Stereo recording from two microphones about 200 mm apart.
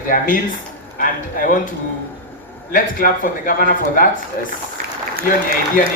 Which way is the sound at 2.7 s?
45° left (ahead or behind).